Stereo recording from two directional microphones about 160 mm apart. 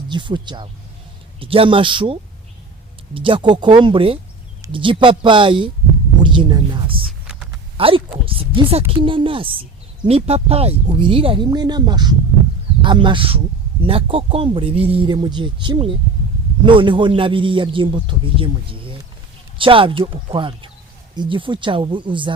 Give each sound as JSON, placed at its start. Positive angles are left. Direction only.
{"t": 0.1, "sound": "a man's voice", "side_deg": -30}
{"t": 3.2, "sound": "a man's voice", "side_deg": -30}